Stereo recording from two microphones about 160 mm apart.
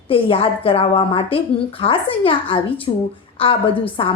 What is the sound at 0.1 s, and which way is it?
A woman's voice, 35° left (ahead or behind).